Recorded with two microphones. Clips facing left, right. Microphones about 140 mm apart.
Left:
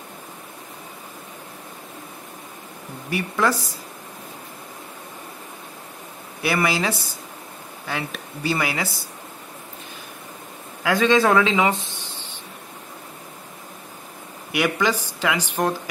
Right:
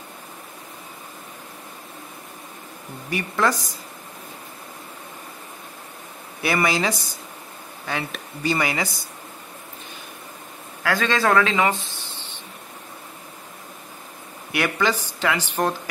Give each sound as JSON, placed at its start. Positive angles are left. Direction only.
{"t": 3.1, "sound": "speech", "side_deg": 5}
{"t": 6.4, "sound": "speech", "side_deg": 5}
{"t": 10.8, "sound": "a man's voice", "side_deg": 20}
{"t": 11.1, "sound": "speech", "side_deg": 0}
{"t": 11.4, "sound": "speech", "side_deg": 15}
{"t": 14.5, "sound": "speech", "side_deg": 10}